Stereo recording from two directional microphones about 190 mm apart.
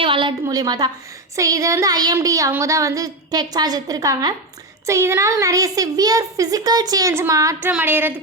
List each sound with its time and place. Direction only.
0.0 s a woman's voice: 25° right (ahead or behind); by 8.1 s 10° right (ahead or behind)